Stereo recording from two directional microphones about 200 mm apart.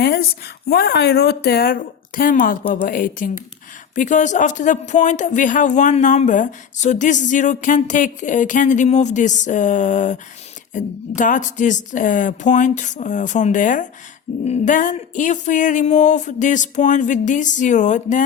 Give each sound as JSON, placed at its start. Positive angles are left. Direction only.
{"t": 0.0, "sound": "speech", "side_deg": 50}